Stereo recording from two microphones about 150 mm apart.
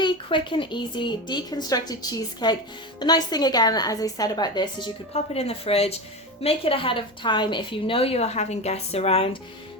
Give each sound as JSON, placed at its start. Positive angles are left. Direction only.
{"t": 0.0, "sound": "a woman's voice", "side_deg": 35}
{"t": 5.1, "sound": "a woman's voice", "side_deg": 45}